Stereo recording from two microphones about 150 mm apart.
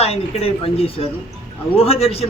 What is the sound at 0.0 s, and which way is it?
A man's voice, 45° left (ahead or behind).